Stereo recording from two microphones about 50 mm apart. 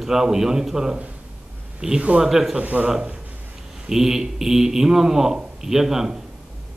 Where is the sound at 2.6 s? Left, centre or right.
Right.